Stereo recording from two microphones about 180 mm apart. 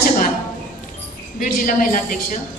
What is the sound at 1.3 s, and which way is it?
Speech, 50° left (ahead or behind).